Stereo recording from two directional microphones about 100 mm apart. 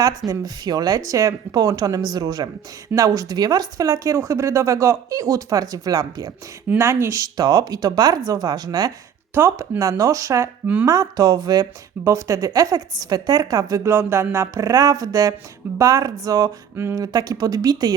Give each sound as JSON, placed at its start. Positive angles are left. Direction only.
{"t": 0.0, "sound": "speech", "side_deg": -35}
{"t": 6.7, "sound": "speech", "side_deg": -30}
{"t": 9.3, "sound": "speech", "side_deg": -30}